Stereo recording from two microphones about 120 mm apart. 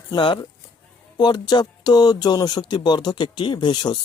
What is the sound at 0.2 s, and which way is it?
Speech, 45° left (ahead or behind).